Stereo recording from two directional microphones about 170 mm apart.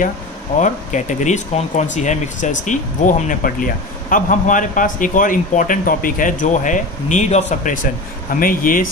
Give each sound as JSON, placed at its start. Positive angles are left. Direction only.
{"t": 0.6, "sound": "speech", "side_deg": 45}